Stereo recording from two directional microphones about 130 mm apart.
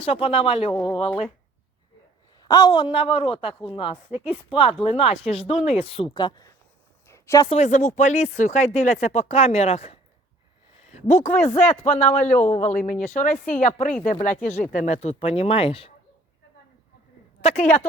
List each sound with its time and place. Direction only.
0.0 s speech: 50° left (ahead or behind)
2.4 s a woman's voice: 30° left (ahead or behind)
6.1 s a woman's voice: 35° left (ahead or behind)
7.1 s a sound: 20° left (ahead or behind)
7.5 s speech: 65° left (ahead or behind)
10.8 s a man's voice: 65° left (ahead or behind)
12.2 s speech: 15° left (ahead or behind)
12.5 s speech: 50° left (ahead or behind)
12.7 s speech: 90° left
13.1 s speech: 75° left (ahead or behind); by 15.1 s 60° left (ahead or behind)
15.2 s speech: 50° left (ahead or behind)
17.4 s a woman's voice: 60° left (ahead or behind)